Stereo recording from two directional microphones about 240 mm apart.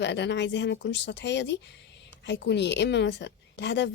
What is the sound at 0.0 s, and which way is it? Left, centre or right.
A woman's voice, left.